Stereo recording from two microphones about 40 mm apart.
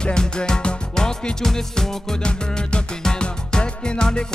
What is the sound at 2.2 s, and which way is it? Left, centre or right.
Music, left.